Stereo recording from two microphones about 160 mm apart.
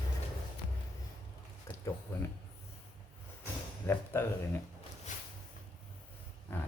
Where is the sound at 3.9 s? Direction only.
15° left (ahead or behind).